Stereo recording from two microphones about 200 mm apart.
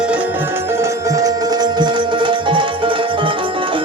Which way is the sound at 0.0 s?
5° right (ahead or behind).